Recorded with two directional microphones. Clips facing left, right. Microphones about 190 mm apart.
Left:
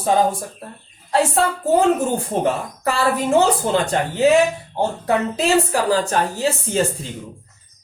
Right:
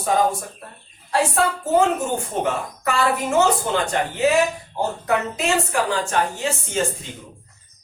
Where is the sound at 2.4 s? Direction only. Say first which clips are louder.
Left 3 dB; 35° left (ahead or behind).